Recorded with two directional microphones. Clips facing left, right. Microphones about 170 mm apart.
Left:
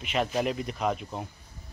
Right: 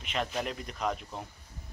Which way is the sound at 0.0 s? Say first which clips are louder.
Left 6 dB; 5° left (ahead or behind).